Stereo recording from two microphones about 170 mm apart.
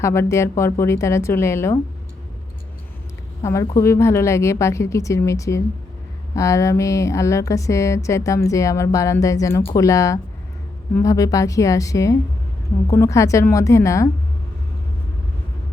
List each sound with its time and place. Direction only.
0.0 s speech: 15° left (ahead or behind)
3.4 s speech: 20° left (ahead or behind)